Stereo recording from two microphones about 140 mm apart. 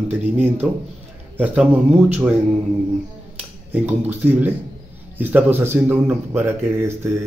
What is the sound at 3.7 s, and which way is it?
Speech, 15° right (ahead or behind).